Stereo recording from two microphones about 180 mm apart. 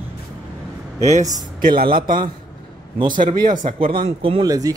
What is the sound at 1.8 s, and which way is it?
Speech, 50° right (ahead or behind).